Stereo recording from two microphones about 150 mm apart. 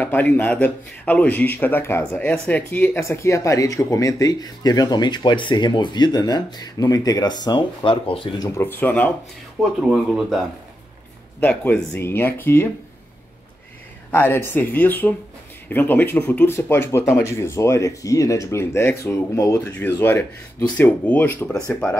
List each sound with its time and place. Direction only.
0.0 s speech: 10° left (ahead or behind); by 8.5 s 35° left (ahead or behind)
8.5 s speech: 15° left (ahead or behind)
9.6 s speech: 5° right (ahead or behind)
11.3 s speech: 10° left (ahead or behind)
14.1 s speech: 15° left (ahead or behind)